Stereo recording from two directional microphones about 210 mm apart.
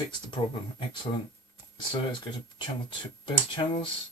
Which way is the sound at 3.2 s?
25° left (ahead or behind).